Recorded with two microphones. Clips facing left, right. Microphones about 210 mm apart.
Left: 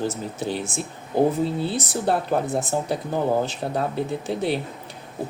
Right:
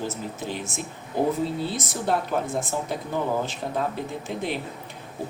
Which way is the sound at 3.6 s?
60° left (ahead or behind).